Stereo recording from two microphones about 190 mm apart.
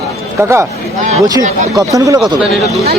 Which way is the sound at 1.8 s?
20° right (ahead or behind).